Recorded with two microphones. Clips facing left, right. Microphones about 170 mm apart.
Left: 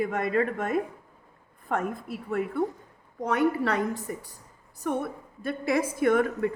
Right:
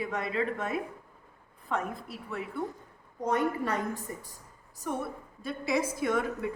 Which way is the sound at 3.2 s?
75° left (ahead or behind).